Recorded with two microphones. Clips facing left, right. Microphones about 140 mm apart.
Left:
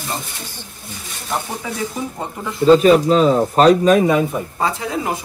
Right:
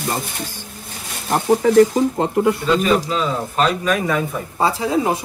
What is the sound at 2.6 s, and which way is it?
Speech, 35° left (ahead or behind).